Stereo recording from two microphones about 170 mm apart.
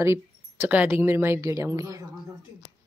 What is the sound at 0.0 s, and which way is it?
Speech, 15° right (ahead or behind).